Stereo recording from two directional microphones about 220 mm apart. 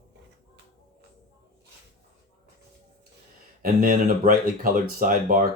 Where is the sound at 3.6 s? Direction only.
40° right (ahead or behind).